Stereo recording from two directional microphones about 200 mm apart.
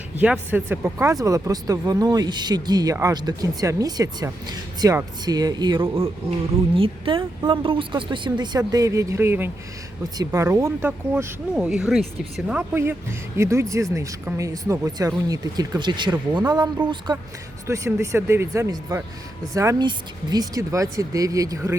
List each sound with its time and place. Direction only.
0.2 s speech: 10° right (ahead or behind)